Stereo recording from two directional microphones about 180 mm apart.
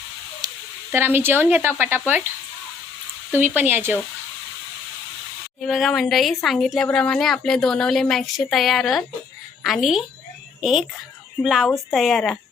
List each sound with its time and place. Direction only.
0.4 s sizzle: 20° right (ahead or behind)
0.9 s speech: 10° right (ahead or behind)
3.3 s speech: 10° right (ahead or behind)
5.6 s speech: centre (ahead or behind)